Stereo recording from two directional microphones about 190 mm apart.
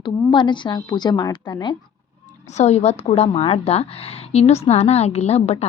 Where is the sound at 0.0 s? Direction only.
25° left (ahead or behind).